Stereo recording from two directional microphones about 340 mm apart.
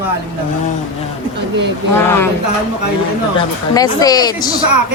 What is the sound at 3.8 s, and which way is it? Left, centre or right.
Speech, centre.